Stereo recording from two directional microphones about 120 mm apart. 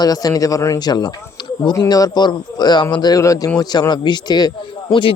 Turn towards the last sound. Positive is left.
turn(degrees=50)  # may be behind; listen again after turning